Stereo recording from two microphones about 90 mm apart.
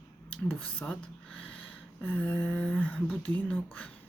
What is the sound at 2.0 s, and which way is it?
Speech, 15° left (ahead or behind).